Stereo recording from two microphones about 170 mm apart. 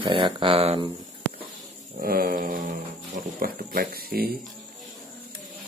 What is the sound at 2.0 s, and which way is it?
Speech, 60° right (ahead or behind).